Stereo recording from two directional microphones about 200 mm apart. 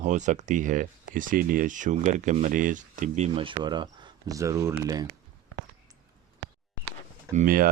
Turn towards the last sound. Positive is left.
turn(degrees=-40)  # may be behind; listen again after turning